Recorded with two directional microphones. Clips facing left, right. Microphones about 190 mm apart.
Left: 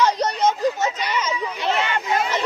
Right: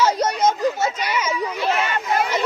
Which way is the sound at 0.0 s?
10° right (ahead or behind).